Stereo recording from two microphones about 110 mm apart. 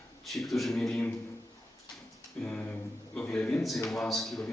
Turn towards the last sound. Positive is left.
turn(degrees=0)  # may be behind; listen again after turning